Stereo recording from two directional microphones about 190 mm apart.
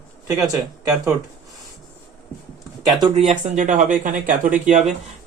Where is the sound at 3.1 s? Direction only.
35° right (ahead or behind).